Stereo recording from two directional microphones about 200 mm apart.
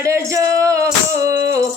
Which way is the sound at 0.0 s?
15° right (ahead or behind).